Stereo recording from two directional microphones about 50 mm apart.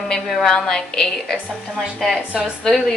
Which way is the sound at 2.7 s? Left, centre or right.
Centre.